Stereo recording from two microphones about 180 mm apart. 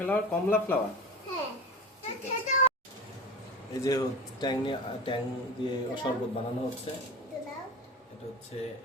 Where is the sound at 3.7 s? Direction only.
20° left (ahead or behind).